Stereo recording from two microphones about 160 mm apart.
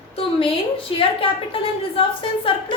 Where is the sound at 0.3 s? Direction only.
35° left (ahead or behind).